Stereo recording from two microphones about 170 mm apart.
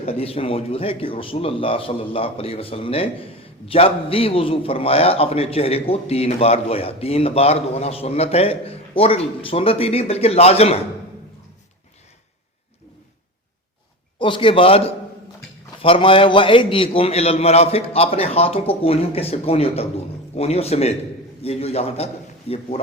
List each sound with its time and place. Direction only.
0.0 s a man's voice: 35° left (ahead or behind)
14.2 s a man's voice: 30° left (ahead or behind)